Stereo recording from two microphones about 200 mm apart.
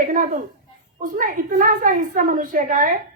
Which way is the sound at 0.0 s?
40° right (ahead or behind).